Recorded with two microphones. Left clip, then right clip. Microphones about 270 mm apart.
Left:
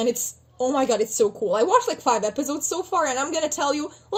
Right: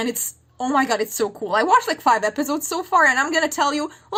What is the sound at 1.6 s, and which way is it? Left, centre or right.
A woman's voice, right.